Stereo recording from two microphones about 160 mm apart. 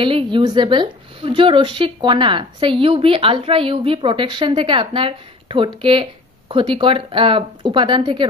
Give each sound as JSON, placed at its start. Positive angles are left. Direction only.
{"t": 0.0, "sound": "speech", "side_deg": -30}